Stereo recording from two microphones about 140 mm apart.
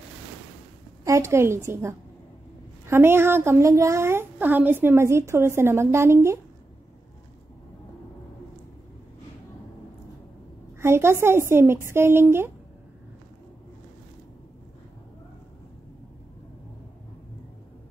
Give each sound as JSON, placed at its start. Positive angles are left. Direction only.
{"t": 1.0, "sound": "a woman's voice", "side_deg": -20}
{"t": 10.8, "sound": "a woman's voice", "side_deg": -20}